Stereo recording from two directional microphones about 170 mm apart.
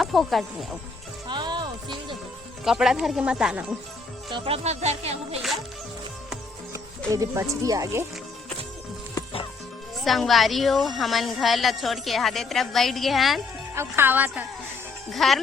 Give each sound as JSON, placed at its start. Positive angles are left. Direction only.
{"t": 0.0, "sound": "speech", "side_deg": 0}
{"t": 1.3, "sound": "music", "side_deg": -25}
{"t": 2.6, "sound": "speech", "side_deg": 0}
{"t": 4.3, "sound": "speech", "side_deg": -35}
{"t": 6.7, "sound": "speech", "side_deg": -20}
{"t": 10.0, "sound": "speech", "side_deg": 0}
{"t": 13.7, "sound": "speech", "side_deg": -15}
{"t": 15.1, "sound": "speech", "side_deg": 0}